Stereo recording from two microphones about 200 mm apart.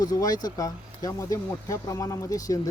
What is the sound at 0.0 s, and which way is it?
A man's voice, 20° left (ahead or behind).